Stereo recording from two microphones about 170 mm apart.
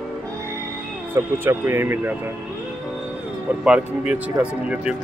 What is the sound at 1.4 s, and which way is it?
Speech, 15° right (ahead or behind).